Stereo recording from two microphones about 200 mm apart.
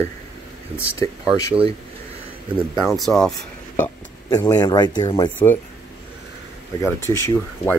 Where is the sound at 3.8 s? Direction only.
15° left (ahead or behind).